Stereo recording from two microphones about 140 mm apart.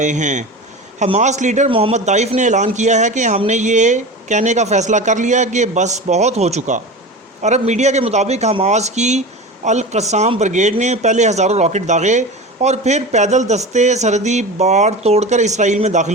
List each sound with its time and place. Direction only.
0.0 s speech: 60° right (ahead or behind)
1.7 s a man's voice: 50° right (ahead or behind)